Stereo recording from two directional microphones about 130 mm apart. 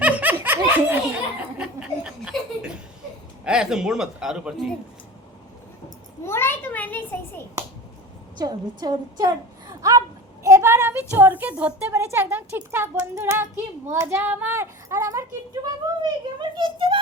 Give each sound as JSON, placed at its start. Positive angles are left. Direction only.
{"t": 0.0, "sound": "laughter", "side_deg": -15}
{"t": 1.5, "sound": "chuckle", "side_deg": -10}
{"t": 3.4, "sound": "speech", "side_deg": -5}
{"t": 6.2, "sound": "a child's voice", "side_deg": 20}
{"t": 8.4, "sound": "a woman's voice", "side_deg": -35}